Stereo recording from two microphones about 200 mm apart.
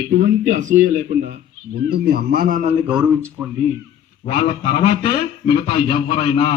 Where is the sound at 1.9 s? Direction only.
50° right (ahead or behind).